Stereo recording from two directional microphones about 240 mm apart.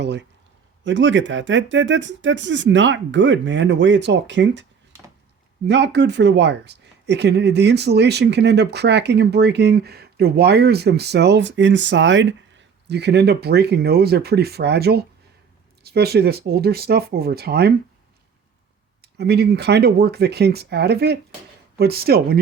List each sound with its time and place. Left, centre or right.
0.0 s speech: right
5.6 s speech: right
19.0 s speech: right